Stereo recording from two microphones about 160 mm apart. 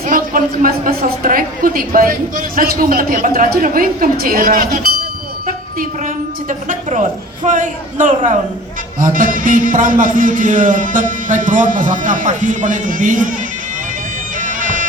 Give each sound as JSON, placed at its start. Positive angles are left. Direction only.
{"t": 0.0, "sound": "a woman's voice", "side_deg": -60}
{"t": 6.5, "sound": "a man's voice", "side_deg": -50}
{"t": 14.3, "sound": "bagpipes", "side_deg": -55}